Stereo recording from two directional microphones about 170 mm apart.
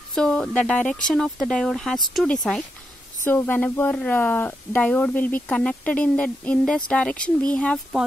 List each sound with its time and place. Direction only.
0.1 s speech: 5° left (ahead or behind)